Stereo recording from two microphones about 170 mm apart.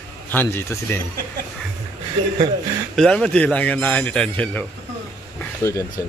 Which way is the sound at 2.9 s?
5° left (ahead or behind).